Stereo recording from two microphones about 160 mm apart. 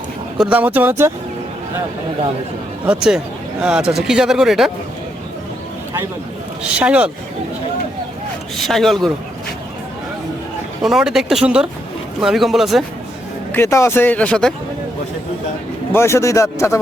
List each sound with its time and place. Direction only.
0.3 s speech: 10° right (ahead or behind)
2.8 s speech: 5° right (ahead or behind)
6.6 s speech: 10° right (ahead or behind)
8.5 s speech: centre (ahead or behind)
10.8 s speech: 5° right (ahead or behind)
13.5 s speech: 15° left (ahead or behind)
15.9 s speech: 15° left (ahead or behind)